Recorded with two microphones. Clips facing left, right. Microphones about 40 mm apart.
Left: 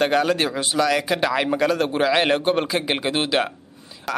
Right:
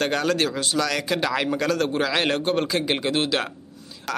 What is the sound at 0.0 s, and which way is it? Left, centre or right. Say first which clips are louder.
A man's voice: left 3 dB; centre.